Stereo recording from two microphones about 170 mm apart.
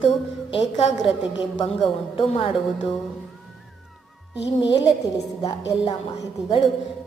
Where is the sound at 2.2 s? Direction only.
30° left (ahead or behind).